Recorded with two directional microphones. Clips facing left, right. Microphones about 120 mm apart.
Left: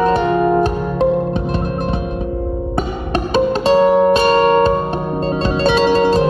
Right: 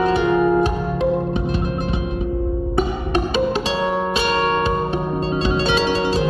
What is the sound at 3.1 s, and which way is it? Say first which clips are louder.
Music: left 5 dB; 40° left (ahead or behind).